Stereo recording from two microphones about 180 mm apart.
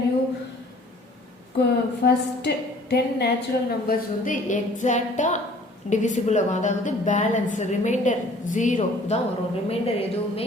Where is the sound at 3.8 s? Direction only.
45° left (ahead or behind).